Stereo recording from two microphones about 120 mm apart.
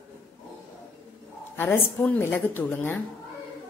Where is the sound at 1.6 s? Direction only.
15° left (ahead or behind).